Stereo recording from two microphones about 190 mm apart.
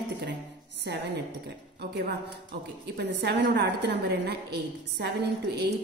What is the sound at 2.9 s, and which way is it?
A woman's voice, 60° right (ahead or behind).